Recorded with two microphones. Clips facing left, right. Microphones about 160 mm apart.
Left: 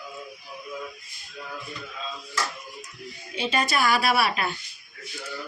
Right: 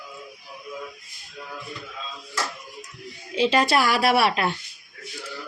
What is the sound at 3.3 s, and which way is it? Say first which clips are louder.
A woman's voice: right 6 dB; 90° right.